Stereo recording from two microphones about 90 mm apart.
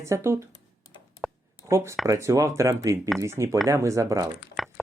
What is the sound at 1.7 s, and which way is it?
Speech, 30° right (ahead or behind).